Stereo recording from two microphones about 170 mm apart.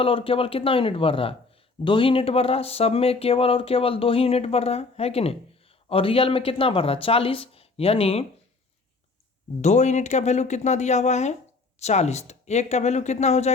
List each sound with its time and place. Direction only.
0.0 s speech: 30° left (ahead or behind)
9.6 s speech: 45° left (ahead or behind)